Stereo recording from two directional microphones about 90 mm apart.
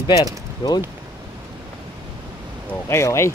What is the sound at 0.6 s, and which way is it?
Speech, 55° left (ahead or behind).